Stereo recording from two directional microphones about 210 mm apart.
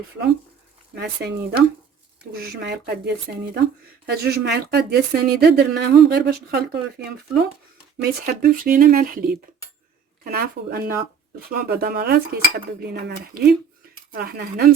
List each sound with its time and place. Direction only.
0.9 s speech: 50° right (ahead or behind)
8.2 s speech: 45° right (ahead or behind)